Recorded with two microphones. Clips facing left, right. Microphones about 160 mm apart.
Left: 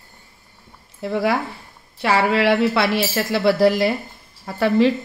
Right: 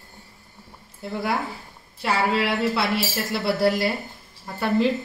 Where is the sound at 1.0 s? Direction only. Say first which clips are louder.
Left 6 dB; 85° left.